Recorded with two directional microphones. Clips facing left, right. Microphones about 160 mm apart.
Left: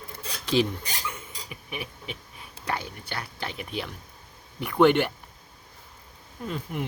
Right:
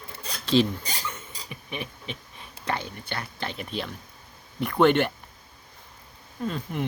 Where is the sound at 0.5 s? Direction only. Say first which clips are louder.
Right 2 dB; 10° left (ahead or behind).